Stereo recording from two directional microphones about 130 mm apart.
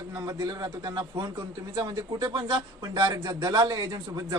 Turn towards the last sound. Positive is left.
turn(degrees=-30)  # may be behind; listen again after turning